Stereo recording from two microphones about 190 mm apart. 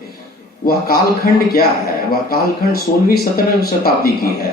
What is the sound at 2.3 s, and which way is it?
Speech, 50° left (ahead or behind).